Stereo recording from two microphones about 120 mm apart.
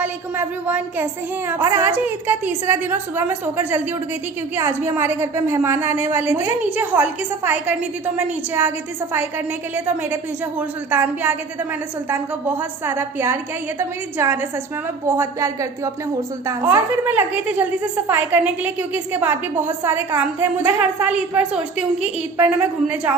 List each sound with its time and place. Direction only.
0.0 s a woman's voice: 15° right (ahead or behind)
9.7 s a woman's voice: 15° right (ahead or behind)